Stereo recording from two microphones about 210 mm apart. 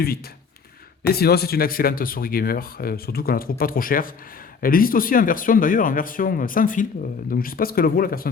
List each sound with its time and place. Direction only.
1.0 s speech: 45° left (ahead or behind)